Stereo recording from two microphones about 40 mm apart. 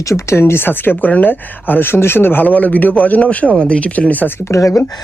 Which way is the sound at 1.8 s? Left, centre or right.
Left.